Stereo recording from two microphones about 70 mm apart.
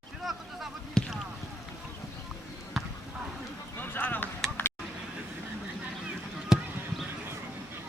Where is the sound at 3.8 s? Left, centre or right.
Left.